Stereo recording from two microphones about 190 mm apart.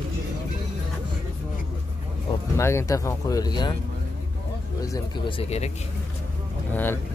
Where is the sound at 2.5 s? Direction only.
15° left (ahead or behind).